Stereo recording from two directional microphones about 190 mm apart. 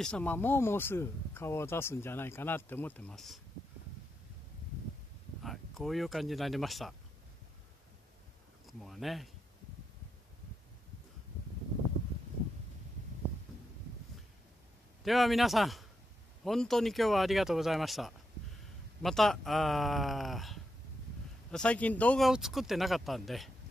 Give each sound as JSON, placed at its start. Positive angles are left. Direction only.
{"t": 0.0, "sound": "speech", "side_deg": 5}
{"t": 5.4, "sound": "speech", "side_deg": 0}
{"t": 8.6, "sound": "speech", "side_deg": 0}
{"t": 15.0, "sound": "speech", "side_deg": 0}